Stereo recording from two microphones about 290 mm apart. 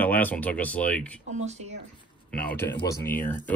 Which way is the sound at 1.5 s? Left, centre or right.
Right.